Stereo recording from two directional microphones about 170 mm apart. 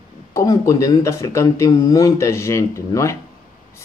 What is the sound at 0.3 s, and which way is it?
Speech, 20° left (ahead or behind).